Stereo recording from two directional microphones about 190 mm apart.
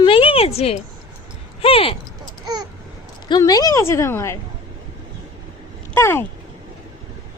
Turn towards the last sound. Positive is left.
turn(degrees=15)  # may be behind; listen again after turning